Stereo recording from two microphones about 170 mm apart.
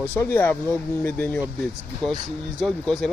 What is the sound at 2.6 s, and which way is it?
Speech, centre (ahead or behind).